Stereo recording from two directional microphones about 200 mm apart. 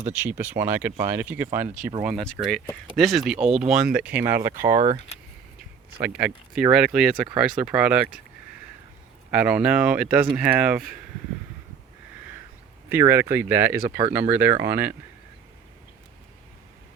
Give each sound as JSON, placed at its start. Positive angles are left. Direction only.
{"t": 0.1, "sound": "speech", "side_deg": -10}
{"t": 2.0, "sound": "speech", "side_deg": 0}
{"t": 3.4, "sound": "speech", "side_deg": -30}
{"t": 3.7, "sound": "speech", "side_deg": -5}
{"t": 6.0, "sound": "speech", "side_deg": -5}
{"t": 9.3, "sound": "speech", "side_deg": -5}
{"t": 12.9, "sound": "speech", "side_deg": -10}